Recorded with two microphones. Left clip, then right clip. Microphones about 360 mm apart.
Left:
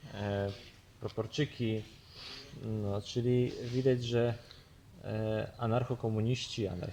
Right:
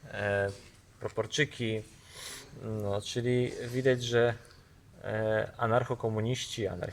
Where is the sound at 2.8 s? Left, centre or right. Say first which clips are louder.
Right 3 dB; right.